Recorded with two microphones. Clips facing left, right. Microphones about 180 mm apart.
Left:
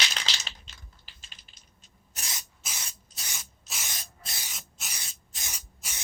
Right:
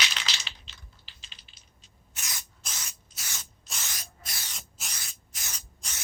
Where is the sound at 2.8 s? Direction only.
25° left (ahead or behind).